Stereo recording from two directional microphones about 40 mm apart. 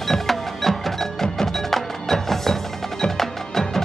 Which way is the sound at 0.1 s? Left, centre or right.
Centre.